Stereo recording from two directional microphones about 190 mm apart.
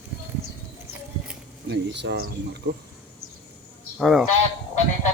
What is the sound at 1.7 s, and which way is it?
Speech, 65° right (ahead or behind).